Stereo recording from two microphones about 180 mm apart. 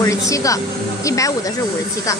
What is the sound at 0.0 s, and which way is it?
Speech, 15° left (ahead or behind).